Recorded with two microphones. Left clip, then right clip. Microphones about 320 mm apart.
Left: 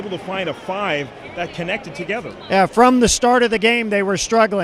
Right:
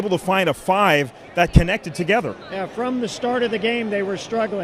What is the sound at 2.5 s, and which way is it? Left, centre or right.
A man's voice, left.